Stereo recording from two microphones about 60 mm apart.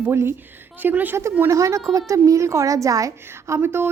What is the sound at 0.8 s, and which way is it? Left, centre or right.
Speech, right.